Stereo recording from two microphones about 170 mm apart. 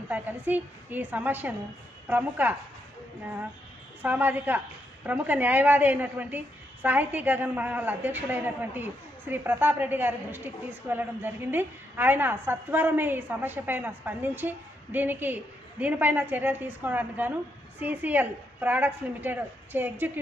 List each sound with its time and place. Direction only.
0.1 s a woman's voice: 10° right (ahead or behind)
4.0 s a woman's voice: 10° right (ahead or behind)